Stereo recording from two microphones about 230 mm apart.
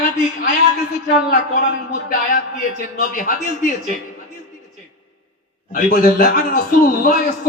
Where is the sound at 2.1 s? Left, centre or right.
Left.